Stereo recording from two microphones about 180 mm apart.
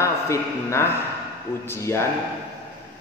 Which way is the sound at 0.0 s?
15° left (ahead or behind).